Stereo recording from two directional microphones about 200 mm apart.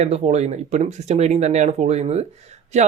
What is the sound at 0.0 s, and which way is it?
Speech, 30° right (ahead or behind).